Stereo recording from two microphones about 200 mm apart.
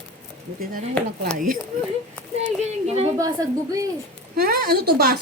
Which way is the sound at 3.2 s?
15° right (ahead or behind).